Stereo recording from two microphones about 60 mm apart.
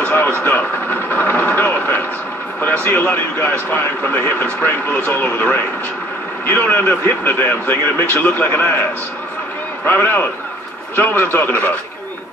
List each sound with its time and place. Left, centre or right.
0.0 s vehicle: left
2.6 s speech: left
6.4 s a man's voice: left
9.8 s speech: left